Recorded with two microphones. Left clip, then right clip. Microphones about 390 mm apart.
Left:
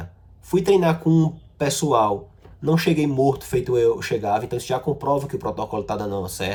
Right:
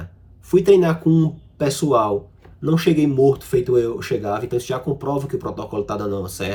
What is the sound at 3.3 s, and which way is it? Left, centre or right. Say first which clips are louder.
Speech: right 4 dB; left.